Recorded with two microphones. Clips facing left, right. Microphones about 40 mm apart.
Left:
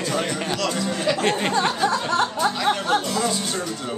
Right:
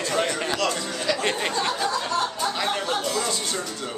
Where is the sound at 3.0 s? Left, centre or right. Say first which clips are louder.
Left 2 dB; centre.